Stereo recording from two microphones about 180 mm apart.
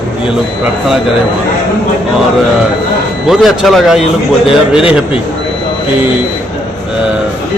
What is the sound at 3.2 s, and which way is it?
Speech, centre (ahead or behind).